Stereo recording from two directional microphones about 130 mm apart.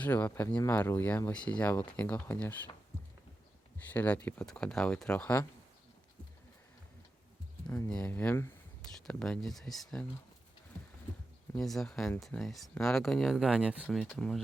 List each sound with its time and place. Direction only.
0.0 s speech: 15° left (ahead or behind)
3.8 s speech: 10° left (ahead or behind)
7.9 s speech: 10° left (ahead or behind)
8.8 s speech: 5° left (ahead or behind)
11.5 s speech: centre (ahead or behind)